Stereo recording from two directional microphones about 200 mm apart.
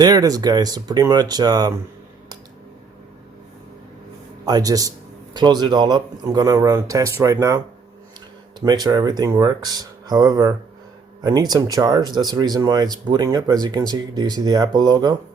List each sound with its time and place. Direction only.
0.0 s speech: 20° right (ahead or behind)
4.4 s a man's voice: 20° right (ahead or behind)
8.6 s speech: 20° right (ahead or behind)